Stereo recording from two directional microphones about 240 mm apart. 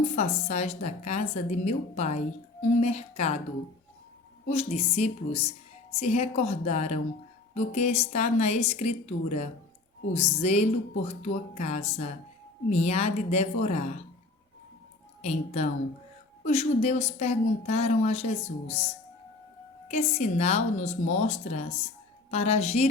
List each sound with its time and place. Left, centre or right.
0.0 s a woman's voice: left
4.4 s a woman's voice: left
15.2 s a woman's voice: left